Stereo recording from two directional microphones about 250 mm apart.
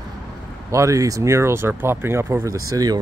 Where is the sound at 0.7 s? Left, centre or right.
Centre.